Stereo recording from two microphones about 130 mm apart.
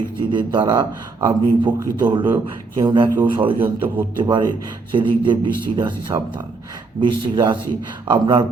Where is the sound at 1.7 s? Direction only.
25° right (ahead or behind).